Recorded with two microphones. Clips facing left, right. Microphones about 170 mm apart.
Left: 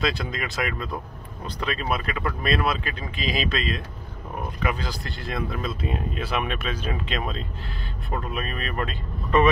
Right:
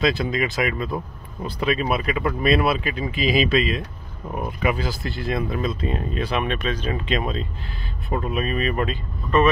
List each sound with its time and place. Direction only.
0.0 s speech: centre (ahead or behind)
9.3 s speech: 15° left (ahead or behind)